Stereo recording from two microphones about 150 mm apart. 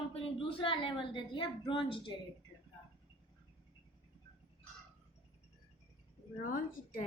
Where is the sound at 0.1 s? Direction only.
35° left (ahead or behind).